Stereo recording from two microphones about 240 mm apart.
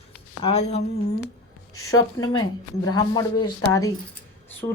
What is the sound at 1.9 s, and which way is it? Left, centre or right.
Speech, centre.